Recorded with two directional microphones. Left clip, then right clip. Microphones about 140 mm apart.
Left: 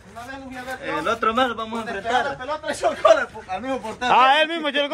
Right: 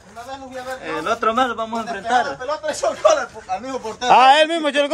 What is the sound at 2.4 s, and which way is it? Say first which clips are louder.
Speech: right 3 dB; 25° right (ahead or behind).